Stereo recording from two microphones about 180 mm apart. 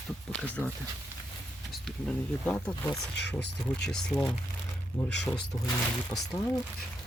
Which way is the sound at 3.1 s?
70° left (ahead or behind).